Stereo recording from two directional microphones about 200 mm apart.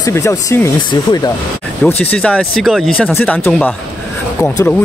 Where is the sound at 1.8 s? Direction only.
5° left (ahead or behind).